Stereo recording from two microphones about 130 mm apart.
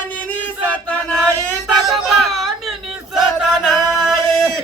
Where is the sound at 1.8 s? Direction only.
Centre (ahead or behind).